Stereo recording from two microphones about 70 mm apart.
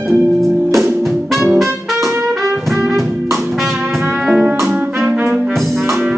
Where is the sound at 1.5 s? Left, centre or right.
Centre.